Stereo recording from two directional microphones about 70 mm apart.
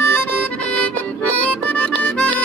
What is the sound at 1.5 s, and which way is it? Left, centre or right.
Music, centre.